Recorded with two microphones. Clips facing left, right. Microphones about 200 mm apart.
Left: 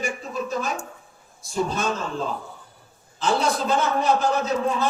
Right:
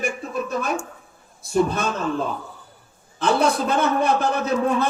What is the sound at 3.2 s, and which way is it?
A man's voice, 60° right (ahead or behind).